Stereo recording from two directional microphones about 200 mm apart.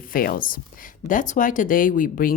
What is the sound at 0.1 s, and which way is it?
Speech, 45° left (ahead or behind).